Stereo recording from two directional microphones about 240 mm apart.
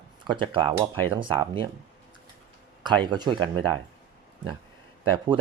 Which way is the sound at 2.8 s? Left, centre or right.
Centre.